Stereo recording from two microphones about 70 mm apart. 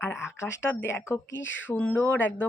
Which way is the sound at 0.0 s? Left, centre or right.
Left.